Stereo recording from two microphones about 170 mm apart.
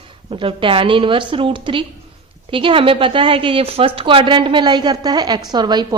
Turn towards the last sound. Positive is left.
turn(degrees=-25)  # may be behind; listen again after turning